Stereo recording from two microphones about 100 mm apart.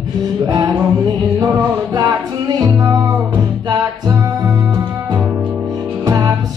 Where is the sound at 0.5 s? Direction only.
35° right (ahead or behind).